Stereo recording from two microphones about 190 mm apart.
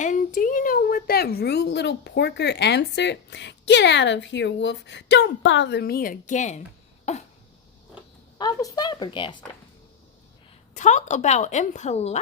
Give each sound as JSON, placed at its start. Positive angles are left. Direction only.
{"t": 0.0, "sound": "a woman's voice", "side_deg": 40}
{"t": 7.0, "sound": "cough", "side_deg": 35}
{"t": 8.4, "sound": "speech", "side_deg": 20}
{"t": 10.8, "sound": "a woman's voice", "side_deg": 40}